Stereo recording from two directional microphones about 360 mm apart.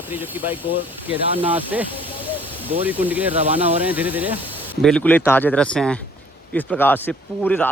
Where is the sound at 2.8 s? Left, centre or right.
Centre.